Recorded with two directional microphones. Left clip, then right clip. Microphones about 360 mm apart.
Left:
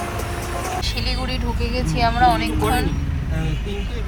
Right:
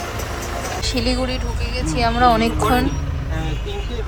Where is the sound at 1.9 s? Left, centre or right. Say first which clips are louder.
Right 1 dB; centre.